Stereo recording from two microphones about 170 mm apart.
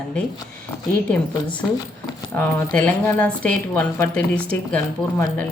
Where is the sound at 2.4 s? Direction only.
5° left (ahead or behind).